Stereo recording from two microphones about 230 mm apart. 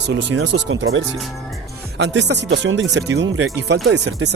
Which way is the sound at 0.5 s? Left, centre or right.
Right.